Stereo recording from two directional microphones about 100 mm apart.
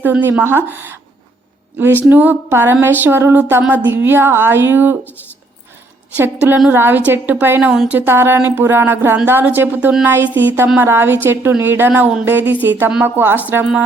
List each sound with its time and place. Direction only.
0.0 s a woman's voice: 20° right (ahead or behind)
2.0 s a woman's voice: 20° right (ahead or behind)
6.1 s a woman's voice: 20° right (ahead or behind)
7.9 s a woman's voice: 20° right (ahead or behind)